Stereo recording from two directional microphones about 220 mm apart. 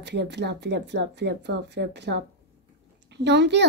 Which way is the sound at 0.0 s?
50° right (ahead or behind).